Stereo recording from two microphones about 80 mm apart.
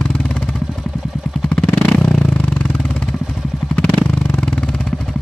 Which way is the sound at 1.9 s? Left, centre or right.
Centre.